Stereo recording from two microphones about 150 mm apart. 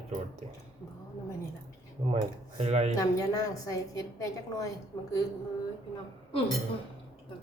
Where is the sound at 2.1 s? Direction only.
40° right (ahead or behind).